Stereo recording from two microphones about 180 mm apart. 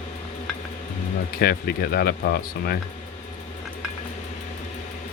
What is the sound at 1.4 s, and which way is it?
Speech, 60° left (ahead or behind).